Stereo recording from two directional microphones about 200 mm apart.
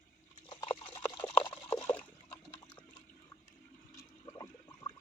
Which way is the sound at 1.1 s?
25° left (ahead or behind).